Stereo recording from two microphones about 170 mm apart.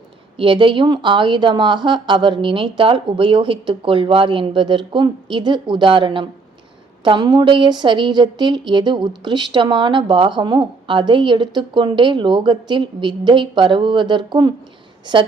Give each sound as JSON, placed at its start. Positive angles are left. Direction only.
{"t": 0.3, "sound": "speech", "side_deg": -30}